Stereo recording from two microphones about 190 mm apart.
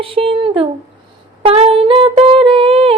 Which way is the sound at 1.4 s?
30° right (ahead or behind).